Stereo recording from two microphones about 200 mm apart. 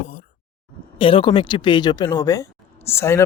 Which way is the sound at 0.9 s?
25° left (ahead or behind).